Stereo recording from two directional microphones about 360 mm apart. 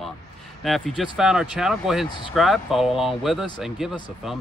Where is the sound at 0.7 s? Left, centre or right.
Centre.